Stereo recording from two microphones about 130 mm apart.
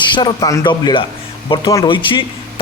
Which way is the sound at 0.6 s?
40° left (ahead or behind).